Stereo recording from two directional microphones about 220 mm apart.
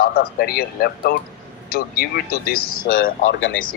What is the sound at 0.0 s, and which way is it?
A man's voice, 45° left (ahead or behind).